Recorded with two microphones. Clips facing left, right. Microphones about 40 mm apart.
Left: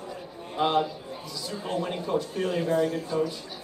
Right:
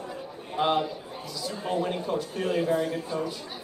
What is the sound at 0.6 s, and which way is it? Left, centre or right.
Speech, centre.